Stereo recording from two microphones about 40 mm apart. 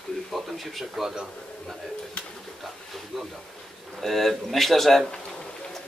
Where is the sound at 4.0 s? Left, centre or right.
Centre.